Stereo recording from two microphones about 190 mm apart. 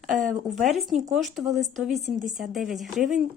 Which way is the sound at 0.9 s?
40° right (ahead or behind).